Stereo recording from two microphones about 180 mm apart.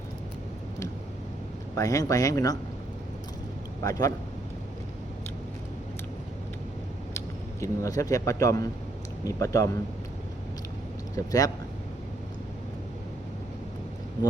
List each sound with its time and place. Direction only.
1.7 s a man's voice: 20° left (ahead or behind)
3.8 s a man's voice: 20° left (ahead or behind)
7.6 s speech: 15° left (ahead or behind)
11.3 s a man's voice: 20° left (ahead or behind)